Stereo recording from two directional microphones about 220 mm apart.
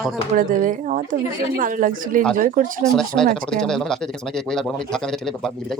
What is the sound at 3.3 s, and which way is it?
Speech, 5° left (ahead or behind).